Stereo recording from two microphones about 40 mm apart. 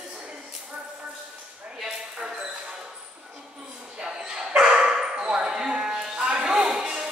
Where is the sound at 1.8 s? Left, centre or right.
Centre.